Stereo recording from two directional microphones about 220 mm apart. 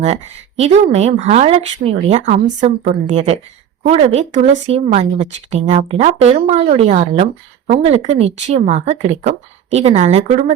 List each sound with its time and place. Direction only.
0.0 s speech: 30° right (ahead or behind)